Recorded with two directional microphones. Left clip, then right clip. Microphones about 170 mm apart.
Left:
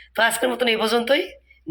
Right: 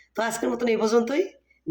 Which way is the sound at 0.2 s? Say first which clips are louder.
Left 6 dB; 5° right (ahead or behind).